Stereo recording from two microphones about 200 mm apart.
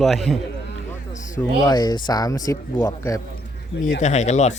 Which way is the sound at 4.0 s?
35° left (ahead or behind).